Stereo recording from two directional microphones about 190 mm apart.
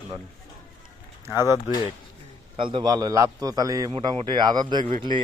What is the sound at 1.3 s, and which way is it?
Speech, 15° right (ahead or behind).